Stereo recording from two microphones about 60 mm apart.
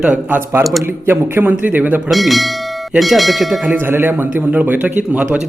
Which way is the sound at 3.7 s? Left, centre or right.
Right.